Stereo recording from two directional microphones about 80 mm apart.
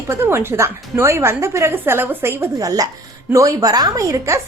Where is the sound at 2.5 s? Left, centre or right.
Right.